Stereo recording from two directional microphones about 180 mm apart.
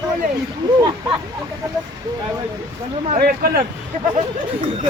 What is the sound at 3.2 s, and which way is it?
Speech, 60° right (ahead or behind).